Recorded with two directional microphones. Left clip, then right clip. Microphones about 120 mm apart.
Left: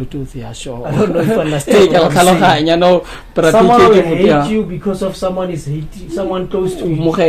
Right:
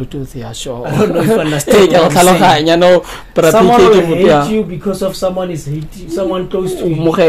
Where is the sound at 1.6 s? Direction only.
55° right (ahead or behind).